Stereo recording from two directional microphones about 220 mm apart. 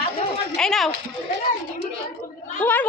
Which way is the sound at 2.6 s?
10° left (ahead or behind).